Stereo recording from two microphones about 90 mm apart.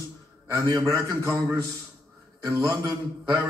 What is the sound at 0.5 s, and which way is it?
A man's voice, 40° right (ahead or behind).